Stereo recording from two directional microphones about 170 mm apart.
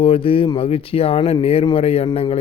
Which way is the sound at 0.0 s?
30° left (ahead or behind).